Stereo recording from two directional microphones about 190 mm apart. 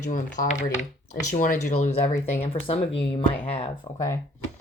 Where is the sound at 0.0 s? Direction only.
45° left (ahead or behind).